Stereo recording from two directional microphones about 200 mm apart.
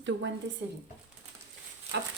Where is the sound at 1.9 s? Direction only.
60° right (ahead or behind).